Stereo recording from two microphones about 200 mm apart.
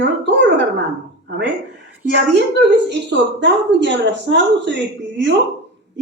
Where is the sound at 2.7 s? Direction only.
60° right (ahead or behind).